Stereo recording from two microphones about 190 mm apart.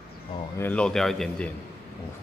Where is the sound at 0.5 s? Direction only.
10° left (ahead or behind).